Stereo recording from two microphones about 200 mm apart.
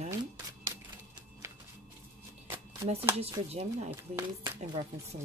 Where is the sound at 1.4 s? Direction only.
15° right (ahead or behind).